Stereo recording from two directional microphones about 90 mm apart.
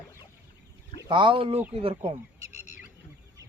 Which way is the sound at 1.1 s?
65° right (ahead or behind).